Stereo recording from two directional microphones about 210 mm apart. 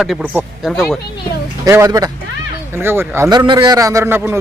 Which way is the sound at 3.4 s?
20° right (ahead or behind).